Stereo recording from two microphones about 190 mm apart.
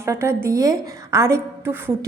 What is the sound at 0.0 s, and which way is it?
A woman's voice, 15° right (ahead or behind).